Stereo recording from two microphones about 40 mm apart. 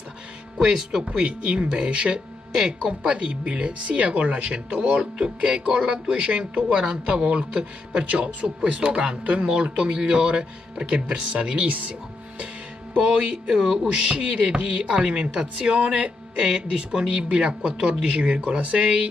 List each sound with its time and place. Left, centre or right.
1.0 s music: right
6.8 s speech: right
9.6 s music: right
12.9 s music: right